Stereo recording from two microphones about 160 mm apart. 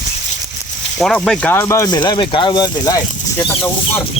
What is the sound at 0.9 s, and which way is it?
Speech, centre (ahead or behind).